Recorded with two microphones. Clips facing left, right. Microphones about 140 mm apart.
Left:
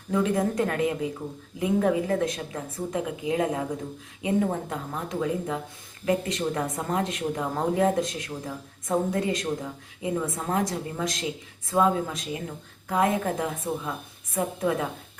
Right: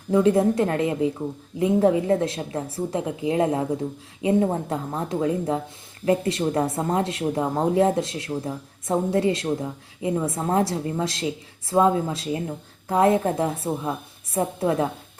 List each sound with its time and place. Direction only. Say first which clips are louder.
0.1 s a woman's voice: right 6 dB; 25° right (ahead or behind)